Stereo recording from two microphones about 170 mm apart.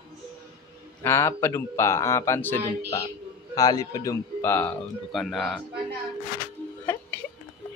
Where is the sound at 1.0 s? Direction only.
15° left (ahead or behind).